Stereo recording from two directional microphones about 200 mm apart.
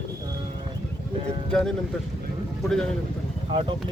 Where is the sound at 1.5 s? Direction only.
5° left (ahead or behind).